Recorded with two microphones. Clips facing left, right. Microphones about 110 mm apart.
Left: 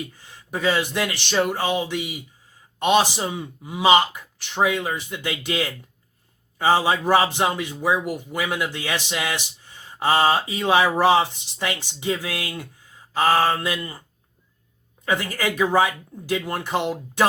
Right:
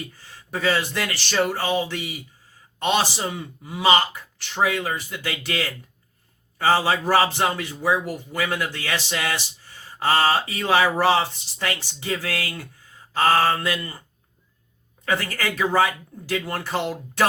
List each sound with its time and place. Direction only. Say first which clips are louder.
0.2 s a man's voice: even; 15° left (ahead or behind)
15.0 s a man's voice: left 1 dB; 15° left (ahead or behind)